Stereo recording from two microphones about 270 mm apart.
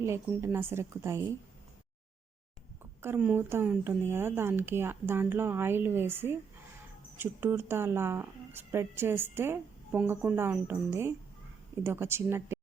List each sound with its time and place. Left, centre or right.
0.0 s speech: centre
3.0 s speech: centre